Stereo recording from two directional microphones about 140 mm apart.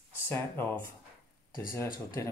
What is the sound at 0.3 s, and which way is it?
Speech, 15° left (ahead or behind).